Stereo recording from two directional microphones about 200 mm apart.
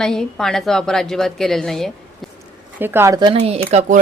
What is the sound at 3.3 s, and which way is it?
Speech, 30° right (ahead or behind).